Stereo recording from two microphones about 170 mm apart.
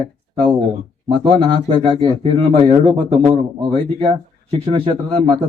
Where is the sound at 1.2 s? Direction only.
30° right (ahead or behind).